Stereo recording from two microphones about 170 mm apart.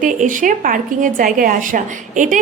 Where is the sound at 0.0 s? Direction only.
50° right (ahead or behind).